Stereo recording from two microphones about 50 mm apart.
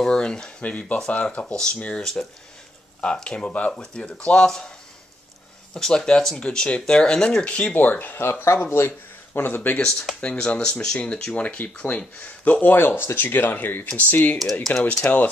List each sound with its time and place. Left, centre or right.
0.0 s speech: centre
5.8 s speech: centre
7.7 s speech: left
10.2 s speech: left
12.6 s speech: left
14.4 s speech: centre
14.7 s speech: left